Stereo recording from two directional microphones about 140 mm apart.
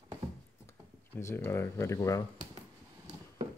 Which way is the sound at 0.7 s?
15° left (ahead or behind).